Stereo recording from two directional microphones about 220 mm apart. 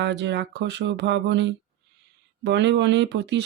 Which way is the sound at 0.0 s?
50° right (ahead or behind).